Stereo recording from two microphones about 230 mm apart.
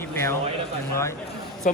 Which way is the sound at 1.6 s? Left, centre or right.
Left.